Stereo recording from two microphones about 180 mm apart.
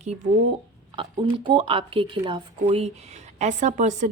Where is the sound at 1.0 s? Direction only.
25° right (ahead or behind); by 4.0 s 45° right (ahead or behind).